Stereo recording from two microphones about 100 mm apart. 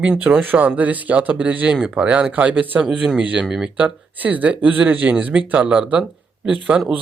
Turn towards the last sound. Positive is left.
turn(degrees=-15)  # may be behind; listen again after turning